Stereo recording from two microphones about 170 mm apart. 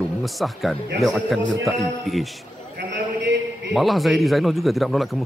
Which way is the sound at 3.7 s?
Centre (ahead or behind).